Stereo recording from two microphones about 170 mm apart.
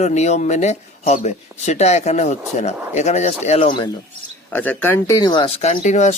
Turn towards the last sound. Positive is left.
turn(degrees=45)  # may be behind; listen again after turning